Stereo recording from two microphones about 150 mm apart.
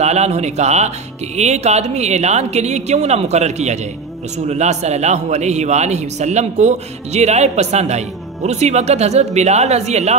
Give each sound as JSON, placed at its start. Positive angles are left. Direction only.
{"t": 0.0, "sound": "a man's voice", "side_deg": -50}